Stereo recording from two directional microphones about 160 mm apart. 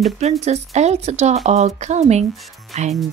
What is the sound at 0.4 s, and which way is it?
Speech, 45° right (ahead or behind).